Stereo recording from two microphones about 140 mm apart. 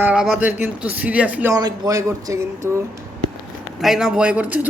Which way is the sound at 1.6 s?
25° right (ahead or behind).